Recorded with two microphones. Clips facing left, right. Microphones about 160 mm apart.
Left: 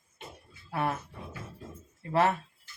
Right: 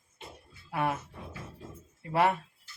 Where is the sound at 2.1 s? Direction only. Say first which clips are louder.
Even; 15° right (ahead or behind).